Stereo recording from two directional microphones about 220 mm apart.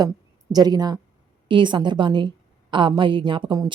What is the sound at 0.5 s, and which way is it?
A woman's voice, 20° right (ahead or behind).